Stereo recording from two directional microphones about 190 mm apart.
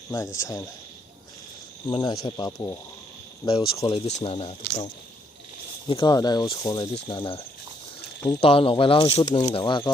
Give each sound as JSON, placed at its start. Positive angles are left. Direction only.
{"t": 0.1, "sound": "speech", "side_deg": 15}
{"t": 1.9, "sound": "speech", "side_deg": 20}
{"t": 5.9, "sound": "speech", "side_deg": 25}